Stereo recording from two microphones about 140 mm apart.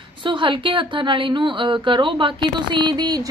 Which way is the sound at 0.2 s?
35° right (ahead or behind).